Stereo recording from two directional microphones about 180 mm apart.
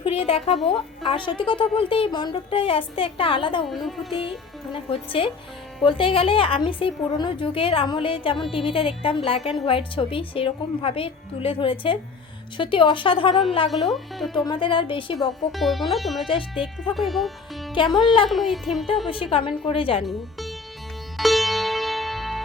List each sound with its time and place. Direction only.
0.0 s speech: 30° left (ahead or behind)
3.7 s speech: centre (ahead or behind)
4.7 s speech: 30° left (ahead or behind)
13.7 s speech: centre (ahead or behind)
14.3 s speech: 25° left (ahead or behind)
15.5 s speech: centre (ahead or behind)
16.2 s speech: 30° left (ahead or behind)
16.9 s speech: centre (ahead or behind)
19.0 s speech: 30° left (ahead or behind)
20.0 s speech: centre (ahead or behind)
21.2 s music: centre (ahead or behind)